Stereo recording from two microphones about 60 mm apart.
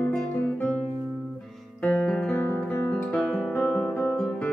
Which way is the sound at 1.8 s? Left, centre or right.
Centre.